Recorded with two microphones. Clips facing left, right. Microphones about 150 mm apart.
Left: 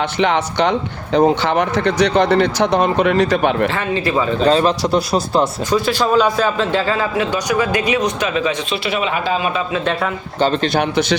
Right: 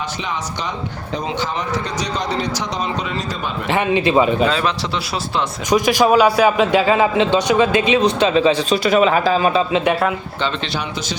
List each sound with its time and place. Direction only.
0.2 s speech: 65° left (ahead or behind)
3.7 s a man's voice: 20° right (ahead or behind)
4.4 s speech: 40° left (ahead or behind)
5.7 s a man's voice: 15° right (ahead or behind); by 8.5 s 30° right (ahead or behind)
8.7 s speech: 40° right (ahead or behind)
10.4 s speech: 45° left (ahead or behind)